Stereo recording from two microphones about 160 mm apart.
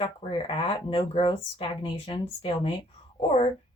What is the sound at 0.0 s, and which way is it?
A woman's voice, 35° left (ahead or behind).